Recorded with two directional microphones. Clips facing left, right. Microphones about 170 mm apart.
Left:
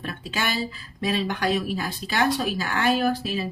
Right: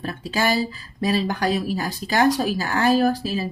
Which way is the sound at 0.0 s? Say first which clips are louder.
Right 6 dB; 35° right (ahead or behind).